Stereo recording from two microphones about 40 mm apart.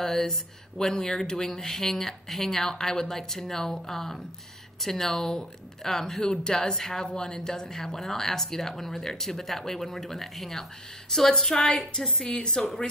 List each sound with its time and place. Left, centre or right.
0.0 s speech: centre